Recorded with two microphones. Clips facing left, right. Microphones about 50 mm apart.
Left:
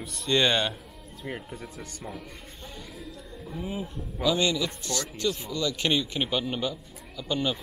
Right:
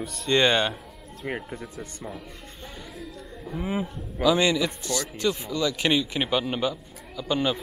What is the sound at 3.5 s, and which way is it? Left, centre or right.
Speech, right.